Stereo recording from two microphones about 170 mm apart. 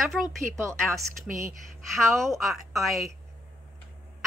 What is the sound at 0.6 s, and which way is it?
Speech, 15° right (ahead or behind).